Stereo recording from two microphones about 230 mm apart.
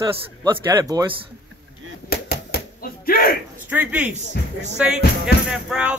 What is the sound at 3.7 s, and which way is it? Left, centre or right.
Speech, centre.